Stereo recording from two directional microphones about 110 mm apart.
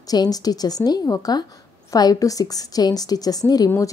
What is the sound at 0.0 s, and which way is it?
A woman's voice, 35° left (ahead or behind).